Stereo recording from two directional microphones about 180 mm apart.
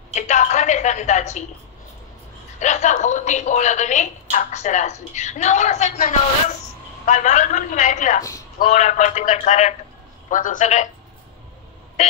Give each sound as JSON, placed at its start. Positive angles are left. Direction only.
{"t": 0.1, "sound": "a sound", "side_deg": 40}
{"t": 2.6, "sound": "a woman's voice", "side_deg": 40}
{"t": 8.2, "sound": "a man's voice", "side_deg": 15}
{"t": 8.5, "sound": "a woman's voice", "side_deg": 40}